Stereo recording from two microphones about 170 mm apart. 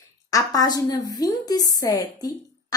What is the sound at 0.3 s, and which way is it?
A woman's voice, 20° left (ahead or behind).